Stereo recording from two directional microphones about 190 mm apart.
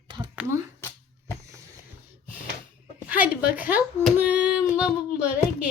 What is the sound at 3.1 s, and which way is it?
Speech, 10° right (ahead or behind).